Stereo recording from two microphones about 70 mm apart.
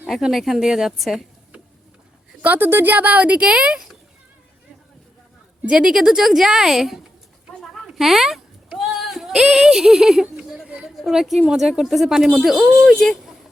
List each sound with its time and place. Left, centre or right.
0.1 s speech: centre
2.4 s speech: right
5.6 s a woman's voice: centre
7.9 s a sound: centre
10.9 s speech: centre